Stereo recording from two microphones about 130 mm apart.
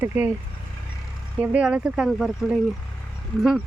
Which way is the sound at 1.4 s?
10° right (ahead or behind).